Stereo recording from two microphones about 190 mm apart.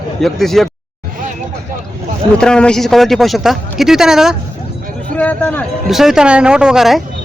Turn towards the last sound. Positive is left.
turn(degrees=0)  # may be behind; listen again after turning